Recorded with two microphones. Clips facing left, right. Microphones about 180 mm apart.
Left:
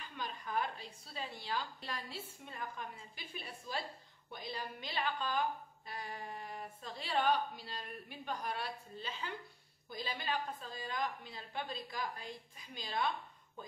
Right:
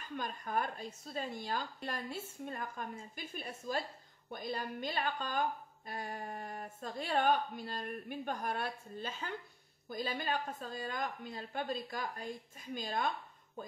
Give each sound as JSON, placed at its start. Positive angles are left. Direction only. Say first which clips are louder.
{"t": 0.0, "sound": "a woman's voice", "louder": "right 3 dB", "side_deg": -45}